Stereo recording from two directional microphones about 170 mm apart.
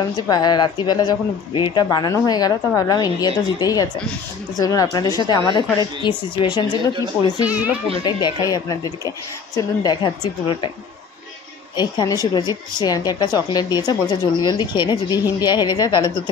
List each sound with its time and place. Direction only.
0.3 s a woman's voice: 25° left (ahead or behind)
7.4 s speech: 10° right (ahead or behind)
8.0 s a woman's voice: 25° left (ahead or behind)
11.7 s a woman's voice: 25° left (ahead or behind)